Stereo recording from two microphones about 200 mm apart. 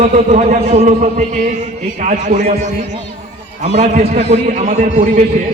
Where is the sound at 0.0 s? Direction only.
40° right (ahead or behind).